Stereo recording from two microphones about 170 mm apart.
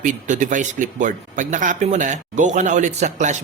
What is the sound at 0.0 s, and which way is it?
Speech, 50° right (ahead or behind).